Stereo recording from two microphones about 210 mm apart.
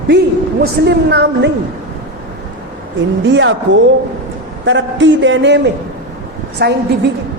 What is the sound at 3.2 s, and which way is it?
A man's voice, 60° right (ahead or behind).